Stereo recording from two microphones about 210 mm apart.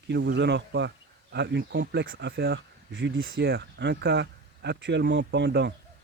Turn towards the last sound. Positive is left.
turn(degrees=-55)  # may be behind; listen again after turning